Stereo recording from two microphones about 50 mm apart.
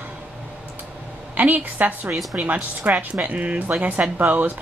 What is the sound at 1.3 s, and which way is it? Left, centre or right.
Speech, right.